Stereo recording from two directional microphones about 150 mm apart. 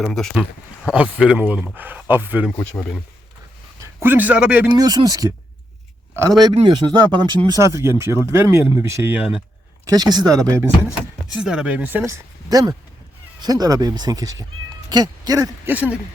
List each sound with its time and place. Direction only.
0.0 s speech: 5° left (ahead or behind)
1.2 s speech: 10° right (ahead or behind)
2.8 s speech: 15° left (ahead or behind)
4.0 s speech: 10° right (ahead or behind)
4.8 s speech: 25° right (ahead or behind)
6.4 s speech: 30° right (ahead or behind); by 9.2 s 15° right (ahead or behind)
9.9 s speech: 25° right (ahead or behind)
11.3 s speech: 5° right (ahead or behind); by 15.7 s 25° right (ahead or behind)
15.7 s speech: 10° right (ahead or behind)